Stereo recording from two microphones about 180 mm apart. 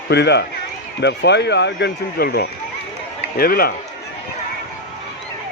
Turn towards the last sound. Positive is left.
turn(degrees=55)  # may be behind; listen again after turning